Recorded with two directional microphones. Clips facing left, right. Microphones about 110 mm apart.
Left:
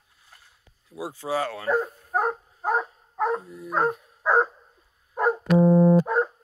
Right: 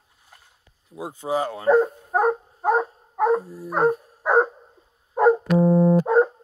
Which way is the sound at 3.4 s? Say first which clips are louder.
Right 5 dB; 30° right (ahead or behind).